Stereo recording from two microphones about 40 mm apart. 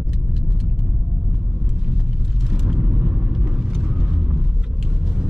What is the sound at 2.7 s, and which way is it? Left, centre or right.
Vehicle, centre.